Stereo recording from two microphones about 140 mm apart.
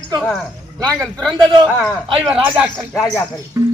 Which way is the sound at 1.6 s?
5° left (ahead or behind).